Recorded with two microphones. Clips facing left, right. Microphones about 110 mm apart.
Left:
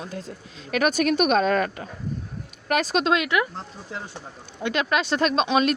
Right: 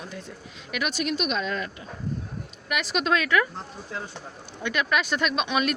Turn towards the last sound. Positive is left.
turn(degrees=30)  # may be behind; listen again after turning